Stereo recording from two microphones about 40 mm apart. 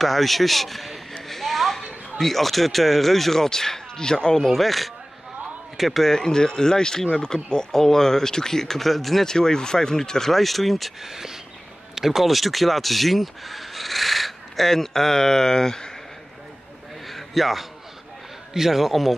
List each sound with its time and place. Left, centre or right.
0.0 s speech: centre
1.3 s a sound: centre
2.1 s speech: centre
4.4 s speech: centre
6.1 s speech: centre
9.2 s speech: centre
11.0 s speech: centre
17.1 s a sound: centre
18.5 s speech: centre